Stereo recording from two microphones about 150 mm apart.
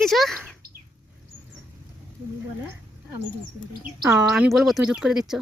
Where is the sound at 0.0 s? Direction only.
Centre (ahead or behind).